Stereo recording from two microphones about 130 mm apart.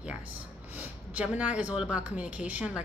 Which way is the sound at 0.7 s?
10° right (ahead or behind).